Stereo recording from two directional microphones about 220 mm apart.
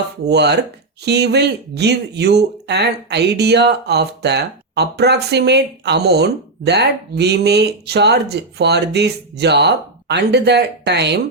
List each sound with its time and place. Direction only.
0.3 s speech: 50° right (ahead or behind)